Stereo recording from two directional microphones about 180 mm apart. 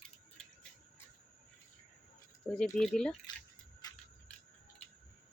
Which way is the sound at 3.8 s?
20° left (ahead or behind).